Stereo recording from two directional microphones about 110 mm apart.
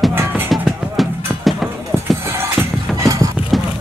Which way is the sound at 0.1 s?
20° right (ahead or behind).